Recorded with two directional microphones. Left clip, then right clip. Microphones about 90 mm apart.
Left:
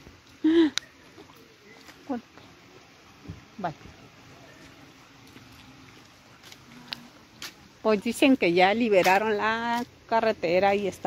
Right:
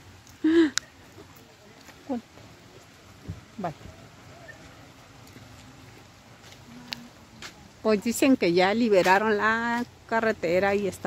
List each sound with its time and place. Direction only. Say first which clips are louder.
0.4 s a sound: even; 15° right (ahead or behind)
6.9 s music: right 1 dB; 20° right (ahead or behind)
7.8 s speech: left 1 dB; 5° right (ahead or behind)
9.0 s speech: right 1 dB; 30° right (ahead or behind)